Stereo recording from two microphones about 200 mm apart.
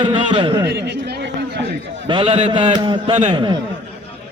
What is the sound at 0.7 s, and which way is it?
Speech, 55° right (ahead or behind).